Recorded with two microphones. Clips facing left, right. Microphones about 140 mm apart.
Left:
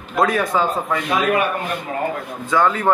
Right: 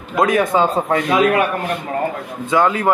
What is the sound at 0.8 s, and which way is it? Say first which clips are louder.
Speech: right 4 dB; 55° right (ahead or behind).